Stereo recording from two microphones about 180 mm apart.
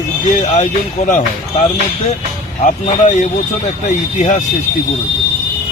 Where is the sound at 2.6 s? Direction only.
40° left (ahead or behind).